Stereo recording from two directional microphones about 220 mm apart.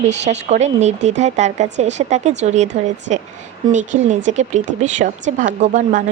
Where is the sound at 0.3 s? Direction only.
30° right (ahead or behind).